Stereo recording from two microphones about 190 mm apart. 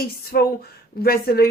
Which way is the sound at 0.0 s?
55° left (ahead or behind).